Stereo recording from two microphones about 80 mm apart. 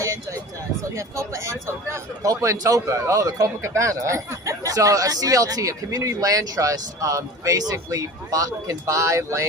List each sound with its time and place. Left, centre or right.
0.9 s a man's voice: right